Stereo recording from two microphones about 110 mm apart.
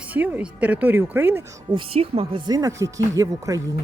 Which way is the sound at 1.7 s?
55° right (ahead or behind).